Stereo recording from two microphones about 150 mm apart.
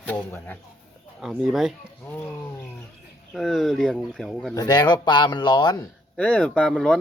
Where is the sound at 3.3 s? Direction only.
Centre (ahead or behind).